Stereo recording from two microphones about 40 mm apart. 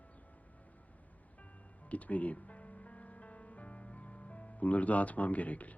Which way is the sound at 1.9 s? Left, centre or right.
Left.